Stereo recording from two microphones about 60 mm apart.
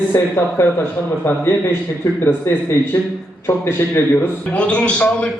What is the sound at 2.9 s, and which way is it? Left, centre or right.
A man's voice, left.